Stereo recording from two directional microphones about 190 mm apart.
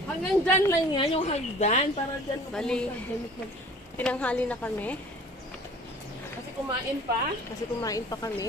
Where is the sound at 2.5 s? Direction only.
5° left (ahead or behind).